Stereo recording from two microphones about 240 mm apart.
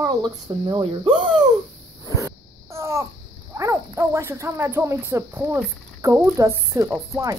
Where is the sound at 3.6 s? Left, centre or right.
Centre.